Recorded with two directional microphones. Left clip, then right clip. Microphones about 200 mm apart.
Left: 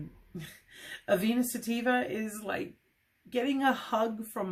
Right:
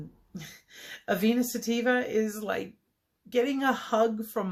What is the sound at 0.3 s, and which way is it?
Speech, 35° right (ahead or behind).